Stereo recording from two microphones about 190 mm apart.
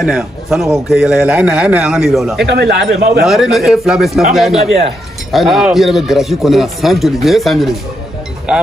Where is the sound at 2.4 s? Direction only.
65° right (ahead or behind).